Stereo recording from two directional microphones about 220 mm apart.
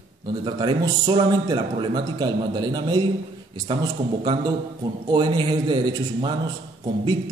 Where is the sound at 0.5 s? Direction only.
20° right (ahead or behind).